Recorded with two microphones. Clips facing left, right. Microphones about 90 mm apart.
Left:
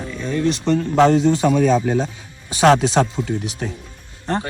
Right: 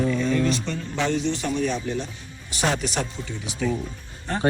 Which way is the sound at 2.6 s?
90° left.